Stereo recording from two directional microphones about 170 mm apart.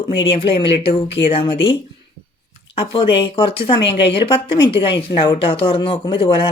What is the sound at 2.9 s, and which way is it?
A woman's voice, 30° left (ahead or behind).